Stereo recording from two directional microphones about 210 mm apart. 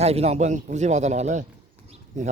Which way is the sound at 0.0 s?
30° right (ahead or behind).